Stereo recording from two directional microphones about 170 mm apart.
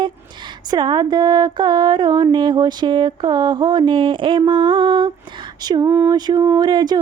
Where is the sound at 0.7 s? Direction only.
25° right (ahead or behind).